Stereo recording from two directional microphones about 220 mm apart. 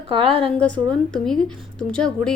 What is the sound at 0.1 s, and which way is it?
Speech, 25° right (ahead or behind).